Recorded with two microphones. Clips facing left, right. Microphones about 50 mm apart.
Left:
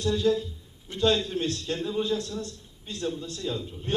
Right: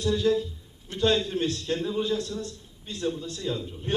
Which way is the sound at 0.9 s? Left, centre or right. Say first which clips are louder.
Even; centre.